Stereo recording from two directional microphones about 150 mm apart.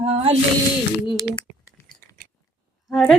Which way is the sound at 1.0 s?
35° left (ahead or behind).